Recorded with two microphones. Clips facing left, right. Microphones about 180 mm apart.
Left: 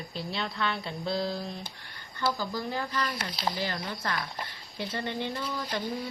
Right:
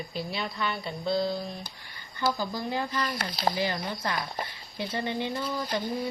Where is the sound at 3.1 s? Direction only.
50° right (ahead or behind).